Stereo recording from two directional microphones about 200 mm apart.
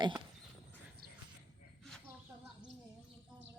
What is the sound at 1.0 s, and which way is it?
Clip-clop, 50° right (ahead or behind).